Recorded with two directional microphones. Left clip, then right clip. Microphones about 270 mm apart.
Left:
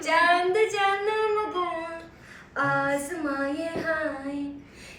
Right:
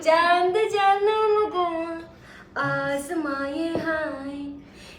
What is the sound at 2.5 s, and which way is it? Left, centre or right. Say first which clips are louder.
Child singing: even; centre.